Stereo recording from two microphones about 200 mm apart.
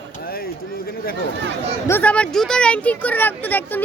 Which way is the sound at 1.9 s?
10° left (ahead or behind).